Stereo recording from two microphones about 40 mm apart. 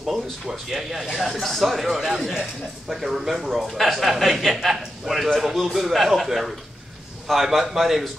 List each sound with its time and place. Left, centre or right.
0.0 s a man's voice: centre